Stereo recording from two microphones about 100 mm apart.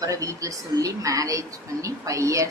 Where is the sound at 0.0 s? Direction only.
35° right (ahead or behind).